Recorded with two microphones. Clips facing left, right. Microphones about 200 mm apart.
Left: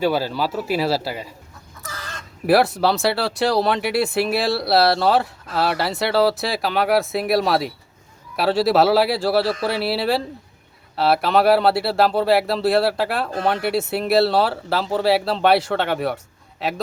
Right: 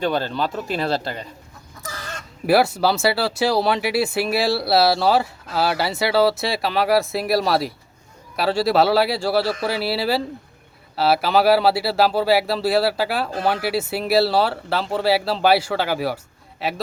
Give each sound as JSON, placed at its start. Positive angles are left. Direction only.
{"t": 0.0, "sound": "speech", "side_deg": 5}
{"t": 2.5, "sound": "speech", "side_deg": 0}